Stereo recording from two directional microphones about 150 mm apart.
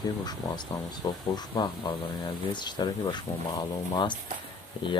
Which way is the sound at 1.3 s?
30° left (ahead or behind).